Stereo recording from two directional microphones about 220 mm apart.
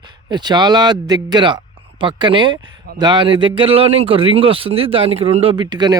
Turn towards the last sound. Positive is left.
turn(degrees=-20)  # may be behind; listen again after turning